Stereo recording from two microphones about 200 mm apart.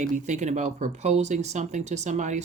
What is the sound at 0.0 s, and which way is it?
Speech, 35° right (ahead or behind).